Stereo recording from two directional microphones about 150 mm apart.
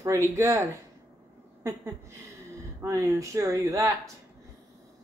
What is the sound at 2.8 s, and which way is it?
Speech, 20° right (ahead or behind).